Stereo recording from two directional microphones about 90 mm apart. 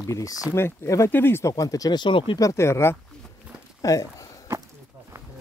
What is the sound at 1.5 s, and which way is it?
Speech, 40° left (ahead or behind).